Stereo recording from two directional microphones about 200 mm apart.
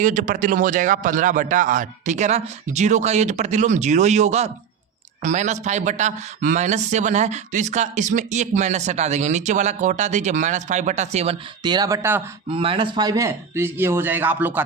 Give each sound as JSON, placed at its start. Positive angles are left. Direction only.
{"t": 0.0, "sound": "a man's voice", "side_deg": -40}
{"t": 12.5, "sound": "speech", "side_deg": -25}